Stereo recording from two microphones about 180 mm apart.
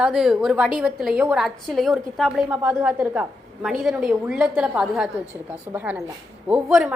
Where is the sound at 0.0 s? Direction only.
5° right (ahead or behind).